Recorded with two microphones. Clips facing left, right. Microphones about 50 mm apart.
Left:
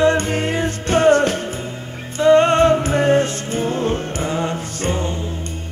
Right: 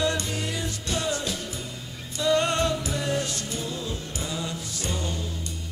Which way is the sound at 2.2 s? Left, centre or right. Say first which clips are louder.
Left 11 dB; left.